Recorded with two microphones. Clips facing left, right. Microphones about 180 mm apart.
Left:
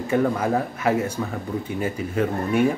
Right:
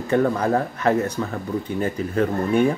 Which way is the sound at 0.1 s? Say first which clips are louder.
Right 2 dB; 5° left (ahead or behind).